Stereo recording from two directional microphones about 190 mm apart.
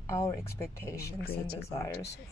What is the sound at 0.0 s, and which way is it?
Speech, 15° left (ahead or behind).